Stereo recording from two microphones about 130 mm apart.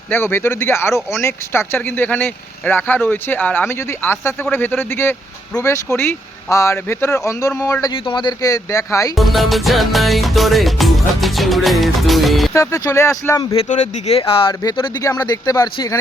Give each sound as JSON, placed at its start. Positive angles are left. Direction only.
{"t": 0.1, "sound": "speech", "side_deg": 15}
{"t": 7.9, "sound": "speech", "side_deg": 40}
{"t": 9.1, "sound": "music", "side_deg": 0}
{"t": 12.5, "sound": "speech", "side_deg": 25}
{"t": 13.7, "sound": "speech", "side_deg": 65}
{"t": 14.2, "sound": "speech", "side_deg": 45}